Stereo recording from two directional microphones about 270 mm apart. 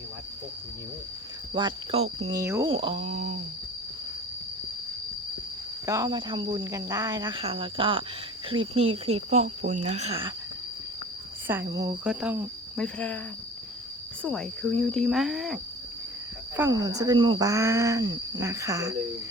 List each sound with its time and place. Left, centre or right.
1.5 s speech: centre
5.8 s speech: centre
11.7 s speech: centre
14.2 s speech: centre
16.6 s speech: centre